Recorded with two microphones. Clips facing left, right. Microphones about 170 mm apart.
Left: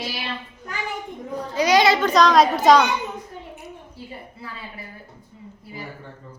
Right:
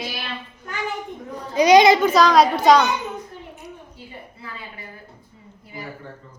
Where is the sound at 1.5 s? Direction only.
20° right (ahead or behind).